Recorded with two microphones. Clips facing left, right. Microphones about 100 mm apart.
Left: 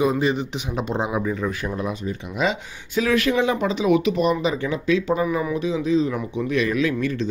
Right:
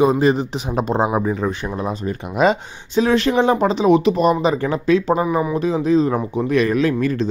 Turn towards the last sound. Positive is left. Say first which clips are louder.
# right 4 dB
turn(degrees=-45)  # may be behind; listen again after turning